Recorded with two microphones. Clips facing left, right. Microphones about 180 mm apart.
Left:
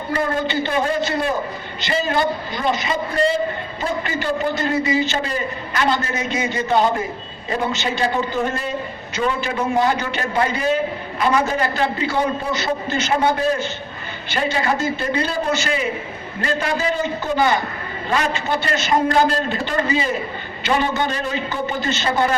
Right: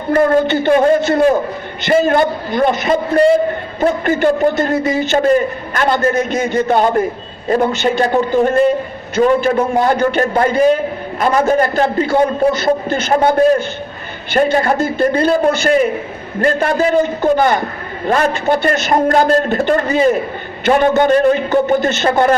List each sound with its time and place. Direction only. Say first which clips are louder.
0.1 s a man's voice: right 10 dB; 55° right (ahead or behind)